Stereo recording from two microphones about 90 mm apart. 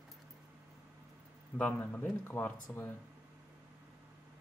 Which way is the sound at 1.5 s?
15° left (ahead or behind).